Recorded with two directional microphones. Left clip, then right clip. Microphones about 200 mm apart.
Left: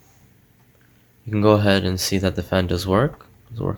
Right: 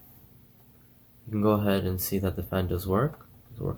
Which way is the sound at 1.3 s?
50° left (ahead or behind).